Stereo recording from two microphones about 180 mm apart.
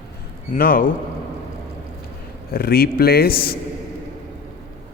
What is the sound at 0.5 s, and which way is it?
Speech, 50° left (ahead or behind).